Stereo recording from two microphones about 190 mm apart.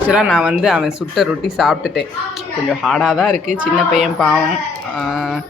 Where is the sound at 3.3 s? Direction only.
40° right (ahead or behind).